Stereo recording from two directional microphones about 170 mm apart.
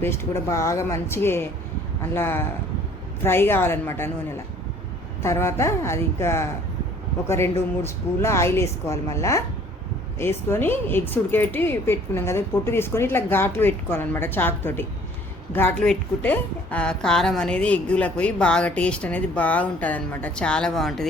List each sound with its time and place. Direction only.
0.0 s a woman's voice: 15° left (ahead or behind)